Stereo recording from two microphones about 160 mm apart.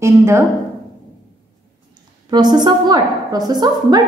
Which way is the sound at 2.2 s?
25° right (ahead or behind).